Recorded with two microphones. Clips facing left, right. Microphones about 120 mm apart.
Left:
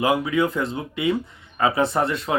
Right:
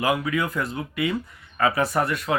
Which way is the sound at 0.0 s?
25° left (ahead or behind).